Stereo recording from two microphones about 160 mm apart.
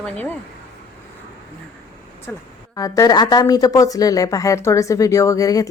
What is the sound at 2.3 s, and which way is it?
A woman's voice, 10° left (ahead or behind).